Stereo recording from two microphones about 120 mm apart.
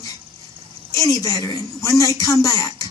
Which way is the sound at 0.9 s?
25° left (ahead or behind).